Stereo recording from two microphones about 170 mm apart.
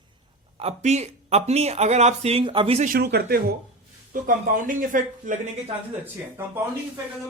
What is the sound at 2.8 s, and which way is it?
Speech, 65° right (ahead or behind).